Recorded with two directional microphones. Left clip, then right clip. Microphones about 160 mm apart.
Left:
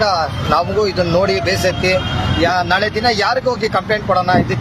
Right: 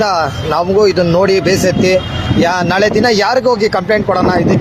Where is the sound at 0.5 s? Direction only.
35° right (ahead or behind).